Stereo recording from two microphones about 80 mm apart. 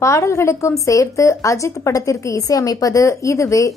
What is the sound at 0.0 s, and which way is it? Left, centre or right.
A woman's voice, left.